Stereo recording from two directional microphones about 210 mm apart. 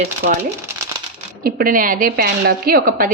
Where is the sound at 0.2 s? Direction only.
40° right (ahead or behind).